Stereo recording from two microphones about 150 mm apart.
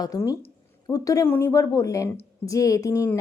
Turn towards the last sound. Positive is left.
turn(degrees=20)  # may be behind; listen again after turning